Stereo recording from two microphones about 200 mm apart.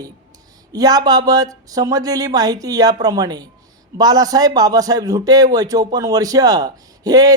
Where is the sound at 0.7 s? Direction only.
20° right (ahead or behind).